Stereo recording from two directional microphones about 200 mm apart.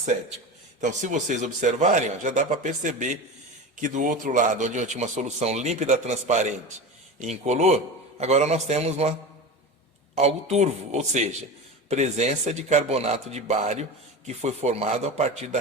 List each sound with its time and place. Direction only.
0.8 s speech: 40° right (ahead or behind)
10.2 s speech: 30° right (ahead or behind)